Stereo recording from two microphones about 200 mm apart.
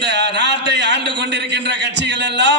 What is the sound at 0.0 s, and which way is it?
A man's voice, 60° right (ahead or behind).